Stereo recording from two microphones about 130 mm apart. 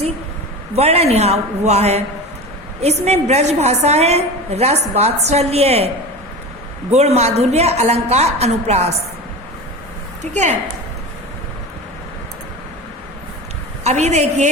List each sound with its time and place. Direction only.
0.8 s a woman's voice: 50° right (ahead or behind)
6.9 s a woman's voice: 55° right (ahead or behind)
10.3 s a woman's voice: 65° right (ahead or behind)
13.8 s a woman's voice: 60° right (ahead or behind)